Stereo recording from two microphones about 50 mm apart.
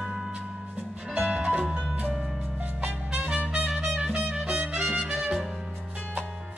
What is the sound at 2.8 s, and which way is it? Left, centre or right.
Music, right.